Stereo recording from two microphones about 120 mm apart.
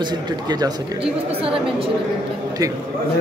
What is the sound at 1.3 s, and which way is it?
Speech, 50° right (ahead or behind).